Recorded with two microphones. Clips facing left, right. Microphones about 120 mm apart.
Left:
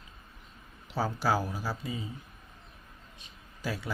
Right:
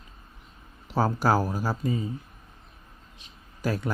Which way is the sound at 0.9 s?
45° right (ahead or behind).